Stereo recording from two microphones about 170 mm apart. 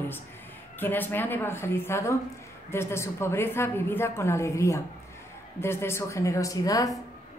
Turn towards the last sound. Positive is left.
turn(degrees=20)  # may be behind; listen again after turning